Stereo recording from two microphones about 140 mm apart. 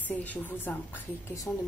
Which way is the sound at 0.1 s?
10° left (ahead or behind).